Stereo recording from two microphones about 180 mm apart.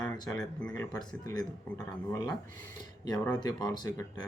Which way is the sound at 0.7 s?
20° left (ahead or behind).